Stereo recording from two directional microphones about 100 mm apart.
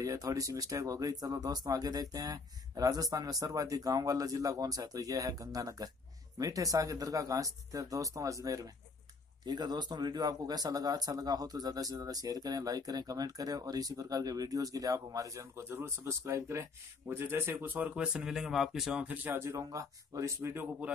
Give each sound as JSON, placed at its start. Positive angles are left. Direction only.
{"t": 0.0, "sound": "speech", "side_deg": -35}
{"t": 9.4, "sound": "speech", "side_deg": -45}